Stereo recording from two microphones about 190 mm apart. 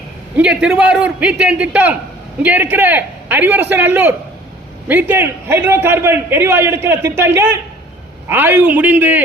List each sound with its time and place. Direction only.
0.3 s a man's voice: 5° right (ahead or behind)